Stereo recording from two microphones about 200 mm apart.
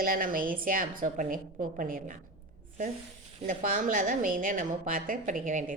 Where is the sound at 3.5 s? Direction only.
40° right (ahead or behind).